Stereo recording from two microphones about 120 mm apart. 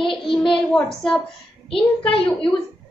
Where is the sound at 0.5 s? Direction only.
5° left (ahead or behind).